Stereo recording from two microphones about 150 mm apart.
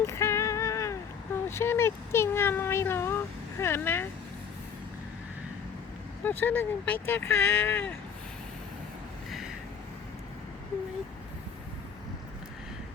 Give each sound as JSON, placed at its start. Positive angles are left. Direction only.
{"t": 0.0, "sound": "a sound", "side_deg": 20}
{"t": 1.5, "sound": "speech", "side_deg": 15}
{"t": 6.2, "sound": "speech", "side_deg": 15}